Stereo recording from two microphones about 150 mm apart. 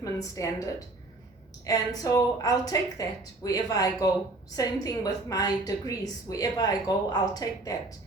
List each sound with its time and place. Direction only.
0.0 s a woman's voice: 20° left (ahead or behind)